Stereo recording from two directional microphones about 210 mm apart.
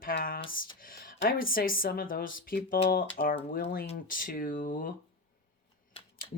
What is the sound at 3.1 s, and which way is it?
Speech, 55° left (ahead or behind).